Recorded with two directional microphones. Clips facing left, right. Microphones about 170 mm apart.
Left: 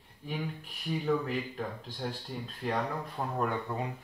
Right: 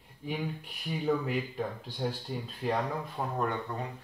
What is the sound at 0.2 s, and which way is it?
Speech, centre (ahead or behind).